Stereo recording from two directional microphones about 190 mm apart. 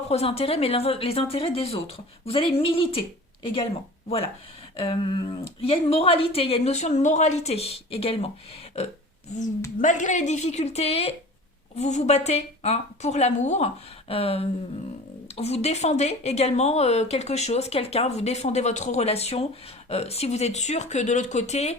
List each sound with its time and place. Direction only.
0.1 s speech: 30° left (ahead or behind)
4.8 s speech: 25° left (ahead or behind)